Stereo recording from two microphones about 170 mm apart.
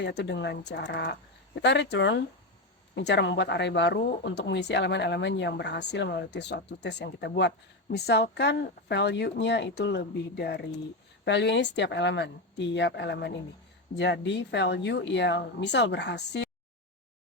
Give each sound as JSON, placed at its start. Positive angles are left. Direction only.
{"t": 0.0, "sound": "speech", "side_deg": 80}
{"t": 11.3, "sound": "speech", "side_deg": 90}